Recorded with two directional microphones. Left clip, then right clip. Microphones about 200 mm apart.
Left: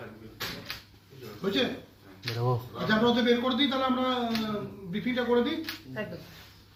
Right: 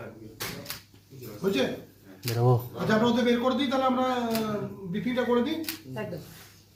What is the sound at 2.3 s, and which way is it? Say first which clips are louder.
Speech: right 5 dB; 25° right (ahead or behind).